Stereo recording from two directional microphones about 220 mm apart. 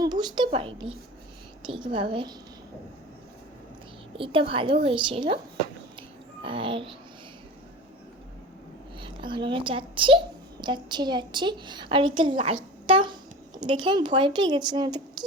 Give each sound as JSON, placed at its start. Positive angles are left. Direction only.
{"t": 0.0, "sound": "a woman's voice", "side_deg": -20}
{"t": 4.2, "sound": "speech", "side_deg": -25}
{"t": 6.0, "sound": "music", "side_deg": -25}
{"t": 9.0, "sound": "a child's voice", "side_deg": -20}